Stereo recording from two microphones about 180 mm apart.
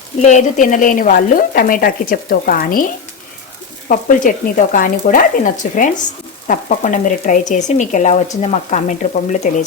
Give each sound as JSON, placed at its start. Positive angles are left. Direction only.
{"t": 0.2, "sound": "speech", "side_deg": 40}
{"t": 3.8, "sound": "speech", "side_deg": 50}